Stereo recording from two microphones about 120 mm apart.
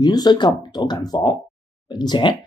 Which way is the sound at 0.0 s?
35° left (ahead or behind).